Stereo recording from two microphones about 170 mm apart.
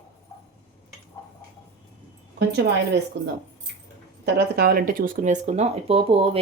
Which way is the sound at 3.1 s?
90° right.